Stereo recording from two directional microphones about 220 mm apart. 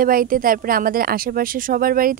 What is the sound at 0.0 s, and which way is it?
A woman's voice, 40° right (ahead or behind).